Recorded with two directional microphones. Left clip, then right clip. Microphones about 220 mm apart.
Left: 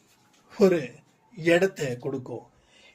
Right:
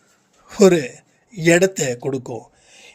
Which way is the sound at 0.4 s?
45° right (ahead or behind).